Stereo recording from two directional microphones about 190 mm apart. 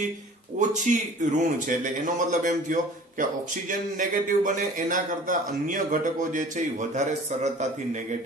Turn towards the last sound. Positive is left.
turn(degrees=-40)  # may be behind; listen again after turning